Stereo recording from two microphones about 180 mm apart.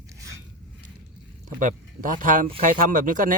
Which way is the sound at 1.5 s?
45° right (ahead or behind).